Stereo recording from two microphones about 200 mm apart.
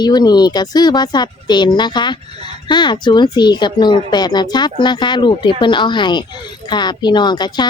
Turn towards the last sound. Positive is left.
turn(degrees=20)  # may be behind; listen again after turning